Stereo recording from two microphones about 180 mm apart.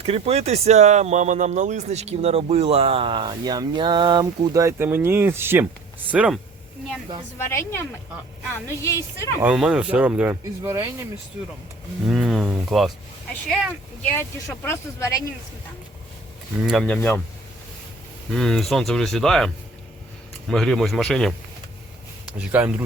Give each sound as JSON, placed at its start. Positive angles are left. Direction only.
{"t": 0.0, "sound": "speech", "side_deg": -35}
{"t": 7.3, "sound": "speech", "side_deg": 15}
{"t": 9.4, "sound": "speech", "side_deg": -5}
{"t": 10.6, "sound": "speech", "side_deg": -20}
{"t": 12.0, "sound": "a sound", "side_deg": 0}
{"t": 13.5, "sound": "speech", "side_deg": 0}
{"t": 14.1, "sound": "speech", "side_deg": 10}
{"t": 16.6, "sound": "speech", "side_deg": 5}
{"t": 18.3, "sound": "speech", "side_deg": 0}
{"t": 20.5, "sound": "speech", "side_deg": 0}
{"t": 22.4, "sound": "speech", "side_deg": -10}